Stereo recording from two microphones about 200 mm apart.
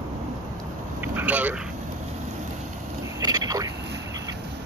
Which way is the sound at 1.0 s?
10° right (ahead or behind).